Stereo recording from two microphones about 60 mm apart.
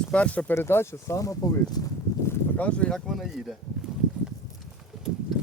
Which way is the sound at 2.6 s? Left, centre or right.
Left.